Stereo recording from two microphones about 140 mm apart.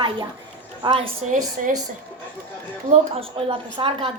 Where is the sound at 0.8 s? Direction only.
35° right (ahead or behind).